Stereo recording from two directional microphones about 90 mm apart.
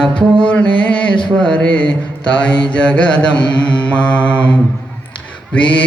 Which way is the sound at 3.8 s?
15° left (ahead or behind).